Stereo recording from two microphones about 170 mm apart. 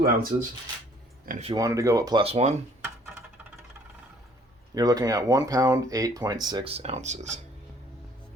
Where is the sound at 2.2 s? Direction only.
35° right (ahead or behind).